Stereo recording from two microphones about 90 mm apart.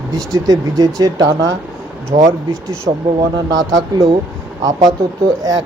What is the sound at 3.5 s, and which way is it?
Speech, 45° right (ahead or behind).